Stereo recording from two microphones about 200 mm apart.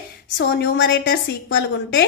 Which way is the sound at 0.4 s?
55° left (ahead or behind).